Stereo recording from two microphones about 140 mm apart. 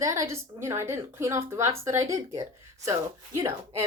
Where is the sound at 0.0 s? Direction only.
20° right (ahead or behind).